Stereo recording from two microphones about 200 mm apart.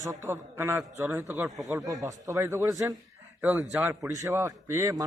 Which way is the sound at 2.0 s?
15° right (ahead or behind).